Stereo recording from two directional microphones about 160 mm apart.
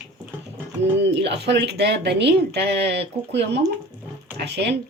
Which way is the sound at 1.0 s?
90° right.